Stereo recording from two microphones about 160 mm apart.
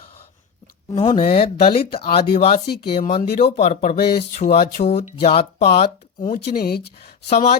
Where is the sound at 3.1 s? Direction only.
45° left (ahead or behind).